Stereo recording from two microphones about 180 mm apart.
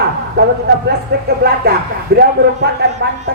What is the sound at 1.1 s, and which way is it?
Speech, 65° right (ahead or behind).